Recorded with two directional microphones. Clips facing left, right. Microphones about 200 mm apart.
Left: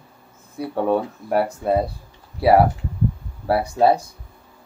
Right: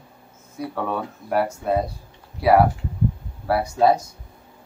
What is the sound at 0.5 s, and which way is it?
Speech, 30° left (ahead or behind).